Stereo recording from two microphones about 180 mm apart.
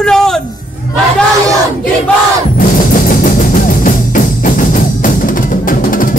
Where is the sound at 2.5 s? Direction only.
50° left (ahead or behind).